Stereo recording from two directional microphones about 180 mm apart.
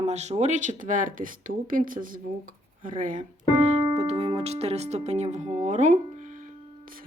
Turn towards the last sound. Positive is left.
turn(degrees=-50)  # may be behind; listen again after turning